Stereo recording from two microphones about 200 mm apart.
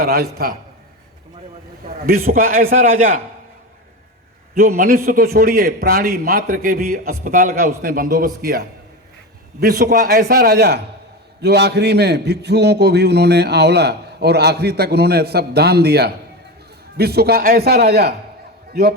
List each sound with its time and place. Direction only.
0.0 s a man's voice: 50° right (ahead or behind)
1.9 s a man's voice: 50° right (ahead or behind)
4.5 s a man's voice: 50° right (ahead or behind)